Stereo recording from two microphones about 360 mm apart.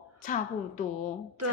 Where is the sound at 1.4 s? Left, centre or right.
Right.